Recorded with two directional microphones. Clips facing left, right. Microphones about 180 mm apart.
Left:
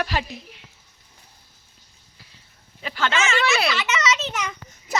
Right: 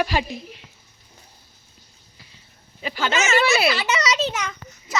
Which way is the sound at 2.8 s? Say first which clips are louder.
Even; 5° right (ahead or behind).